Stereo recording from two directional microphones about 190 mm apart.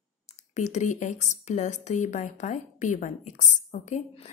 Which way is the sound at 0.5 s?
40° left (ahead or behind).